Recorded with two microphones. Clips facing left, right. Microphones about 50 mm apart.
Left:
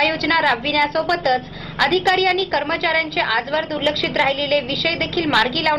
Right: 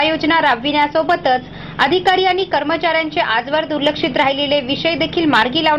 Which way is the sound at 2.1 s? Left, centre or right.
Right.